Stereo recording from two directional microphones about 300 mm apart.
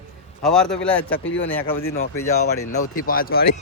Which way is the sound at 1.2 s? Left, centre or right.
Left.